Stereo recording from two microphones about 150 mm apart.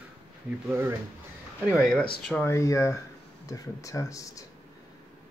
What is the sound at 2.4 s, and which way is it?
Speech, 20° left (ahead or behind).